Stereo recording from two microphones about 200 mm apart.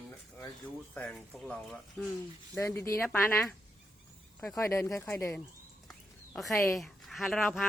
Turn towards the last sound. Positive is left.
turn(degrees=0)  # may be behind; listen again after turning